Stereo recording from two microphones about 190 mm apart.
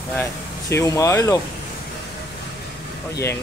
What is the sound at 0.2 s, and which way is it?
Speech, 15° left (ahead or behind).